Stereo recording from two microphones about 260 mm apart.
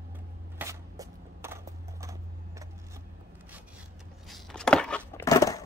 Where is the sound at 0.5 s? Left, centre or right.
Centre.